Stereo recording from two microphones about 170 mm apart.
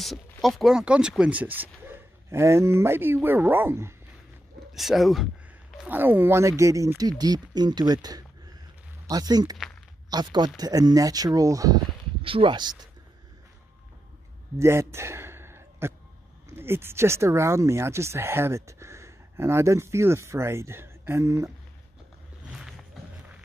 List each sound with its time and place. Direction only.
0.0 s speech: centre (ahead or behind)
4.7 s speech: centre (ahead or behind)
5.8 s speech: 10° right (ahead or behind)
12.2 s speech: 30° right (ahead or behind)
14.6 s a sound: 15° right (ahead or behind)
16.4 s speech: 15° right (ahead or behind)